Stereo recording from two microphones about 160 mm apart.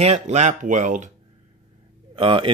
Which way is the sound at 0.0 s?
45° right (ahead or behind).